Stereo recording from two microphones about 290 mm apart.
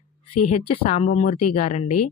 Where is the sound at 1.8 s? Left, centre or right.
Left.